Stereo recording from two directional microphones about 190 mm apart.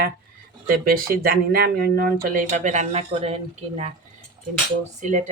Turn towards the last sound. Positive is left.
turn(degrees=-40)  # may be behind; listen again after turning